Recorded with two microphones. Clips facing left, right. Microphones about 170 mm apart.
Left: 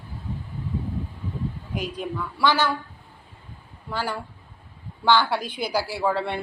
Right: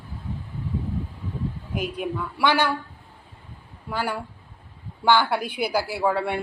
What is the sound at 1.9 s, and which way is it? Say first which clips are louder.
Speech: right 2 dB; 15° right (ahead or behind).